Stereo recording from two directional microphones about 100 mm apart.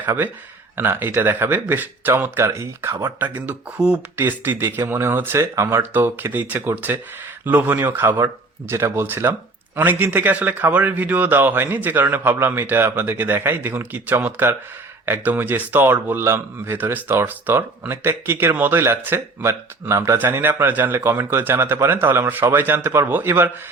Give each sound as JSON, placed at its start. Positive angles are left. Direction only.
{"t": 0.0, "sound": "speech", "side_deg": -20}